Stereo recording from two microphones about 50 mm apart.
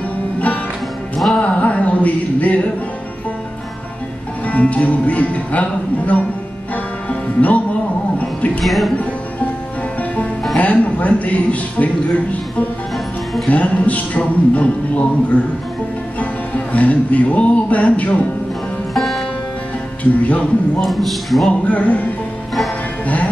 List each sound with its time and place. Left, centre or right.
1.3 s speech: centre
1.6 s a sound: left
4.5 s speech: left
7.1 s music: left
8.5 s speech: centre
10.6 s speech: left
16.2 s music: left
18.9 s music: centre
20.0 s speech: left
20.8 s speech: centre
21.6 s music: left